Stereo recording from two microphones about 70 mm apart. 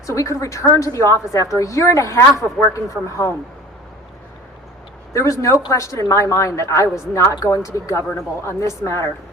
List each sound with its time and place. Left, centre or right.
0.0 s a woman's voice: left
5.1 s a woman's voice: left